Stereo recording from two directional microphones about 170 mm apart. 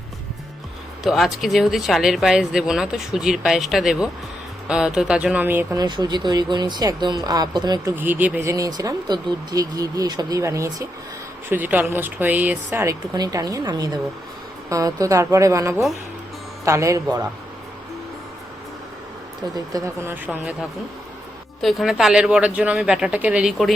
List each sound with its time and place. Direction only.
1.0 s speech: centre (ahead or behind)
5.8 s speech: 25° right (ahead or behind)
7.9 s speech: 10° right (ahead or behind)
19.5 s speech: 20° right (ahead or behind); by 23.7 s centre (ahead or behind)